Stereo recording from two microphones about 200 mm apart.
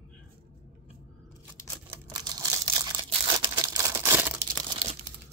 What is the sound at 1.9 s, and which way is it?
Crumpling, 20° right (ahead or behind).